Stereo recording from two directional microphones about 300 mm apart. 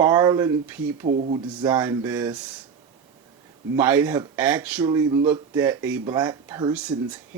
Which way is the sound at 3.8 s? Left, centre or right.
Centre.